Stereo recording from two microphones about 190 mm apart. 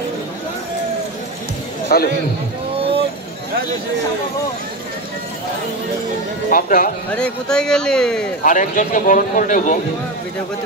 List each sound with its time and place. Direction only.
1.9 s a man's voice: 55° left (ahead or behind)
6.5 s a man's voice: 50° left (ahead or behind)
7.1 s speech: 5° left (ahead or behind)
8.5 s a man's voice: 45° left (ahead or behind)